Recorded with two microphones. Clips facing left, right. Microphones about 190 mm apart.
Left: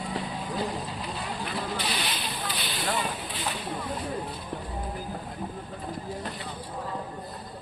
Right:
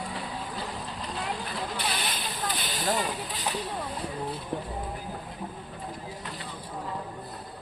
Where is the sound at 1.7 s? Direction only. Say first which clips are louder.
Left 1 dB; 55° right (ahead or behind).